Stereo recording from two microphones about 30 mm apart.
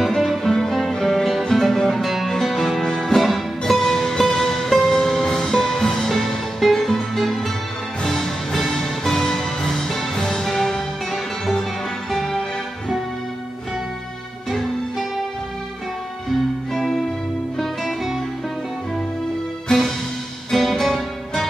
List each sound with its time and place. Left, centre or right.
0.0 s music: centre
2.8 s music: centre
3.2 s music: centre
6.0 s music: centre
8.0 s music: centre
10.4 s music: centre
16.3 s music: centre
19.7 s music: centre
20.5 s music: centre